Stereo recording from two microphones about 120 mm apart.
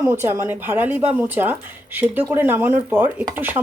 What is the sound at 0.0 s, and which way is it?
Speech, 20° right (ahead or behind).